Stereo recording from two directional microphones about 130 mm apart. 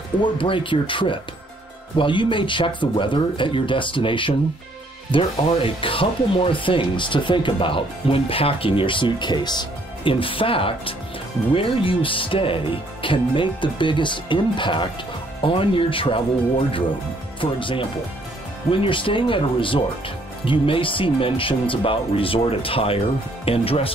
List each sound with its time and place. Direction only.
0.2 s speech: 40° left (ahead or behind)